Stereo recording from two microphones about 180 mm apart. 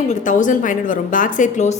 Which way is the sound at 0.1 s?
45° left (ahead or behind).